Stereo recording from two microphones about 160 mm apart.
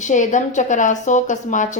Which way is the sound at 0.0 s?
50° left (ahead or behind).